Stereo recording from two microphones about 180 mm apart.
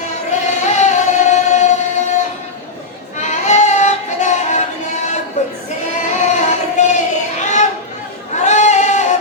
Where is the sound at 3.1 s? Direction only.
40° left (ahead or behind).